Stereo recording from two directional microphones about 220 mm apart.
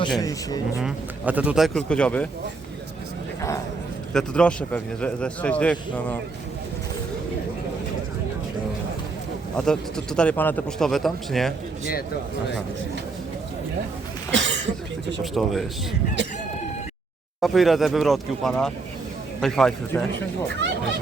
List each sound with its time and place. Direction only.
0.2 s speech: 15° left (ahead or behind)
0.8 s speech: 5° right (ahead or behind)
4.1 s speech: 5° left (ahead or behind)
9.6 s speech: 5° left (ahead or behind)
14.3 s a sound: 55° right (ahead or behind)
15.2 s speech: centre (ahead or behind)
17.4 s speech: centre (ahead or behind)